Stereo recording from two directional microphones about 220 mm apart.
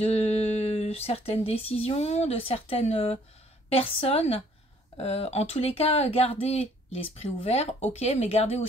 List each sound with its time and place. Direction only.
0.0 s speech: 25° left (ahead or behind)